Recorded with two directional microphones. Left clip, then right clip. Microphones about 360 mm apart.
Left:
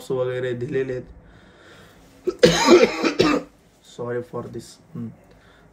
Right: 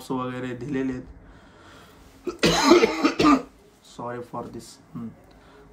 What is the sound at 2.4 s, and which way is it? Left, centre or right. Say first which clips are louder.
Speech: left 4 dB; right.